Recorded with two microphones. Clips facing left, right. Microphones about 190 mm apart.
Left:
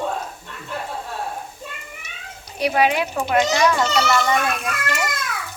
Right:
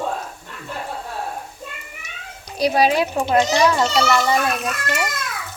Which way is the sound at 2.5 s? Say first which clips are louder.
Right 2 dB; 35° right (ahead or behind).